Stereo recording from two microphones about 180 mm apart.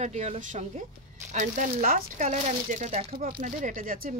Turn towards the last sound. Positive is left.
turn(degrees=-50)  # may be behind; listen again after turning